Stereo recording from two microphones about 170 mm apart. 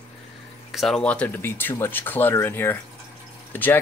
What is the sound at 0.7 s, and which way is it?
Speech, centre (ahead or behind).